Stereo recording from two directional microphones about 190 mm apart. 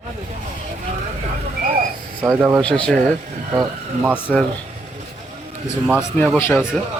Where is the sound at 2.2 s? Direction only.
10° right (ahead or behind).